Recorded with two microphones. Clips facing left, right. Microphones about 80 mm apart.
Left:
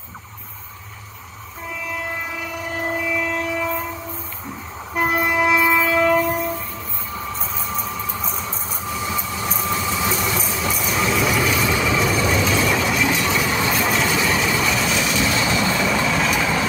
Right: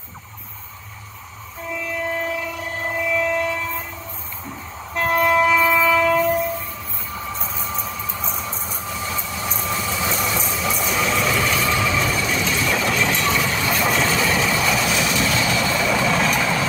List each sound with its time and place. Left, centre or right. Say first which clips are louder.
3.0 s train: right 7 dB; centre
4.9 s train: right 2 dB; centre
7.3 s vehicle: left 1 dB; centre
15.4 s vehicle: left 1 dB; centre
15.7 s vehicle: even; centre